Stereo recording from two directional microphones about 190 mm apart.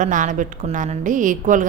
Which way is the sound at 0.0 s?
40° right (ahead or behind).